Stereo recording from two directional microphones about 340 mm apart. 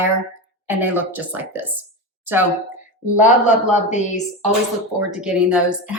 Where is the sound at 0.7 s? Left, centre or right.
Centre.